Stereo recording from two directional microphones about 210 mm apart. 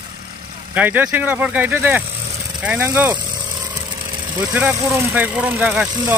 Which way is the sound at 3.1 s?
20° right (ahead or behind).